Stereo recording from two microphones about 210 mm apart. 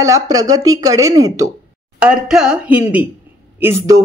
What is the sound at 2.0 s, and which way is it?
A woman's voice, 5° right (ahead or behind).